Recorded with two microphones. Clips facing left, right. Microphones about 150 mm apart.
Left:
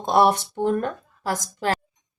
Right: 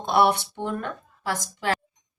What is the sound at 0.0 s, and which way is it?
Speech, 40° left (ahead or behind).